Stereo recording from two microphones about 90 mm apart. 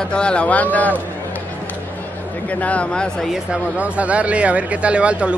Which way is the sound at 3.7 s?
15° right (ahead or behind).